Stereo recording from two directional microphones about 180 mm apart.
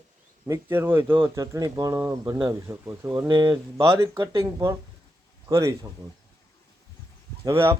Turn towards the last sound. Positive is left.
turn(degrees=-15)  # may be behind; listen again after turning